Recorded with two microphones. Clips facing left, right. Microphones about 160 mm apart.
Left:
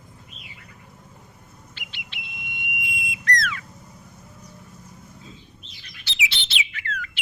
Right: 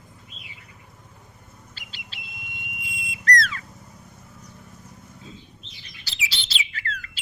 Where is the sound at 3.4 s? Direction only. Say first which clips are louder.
Even; 35° right (ahead or behind).